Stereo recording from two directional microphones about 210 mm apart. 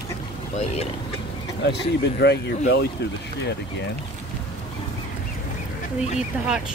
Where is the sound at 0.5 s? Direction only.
30° left (ahead or behind).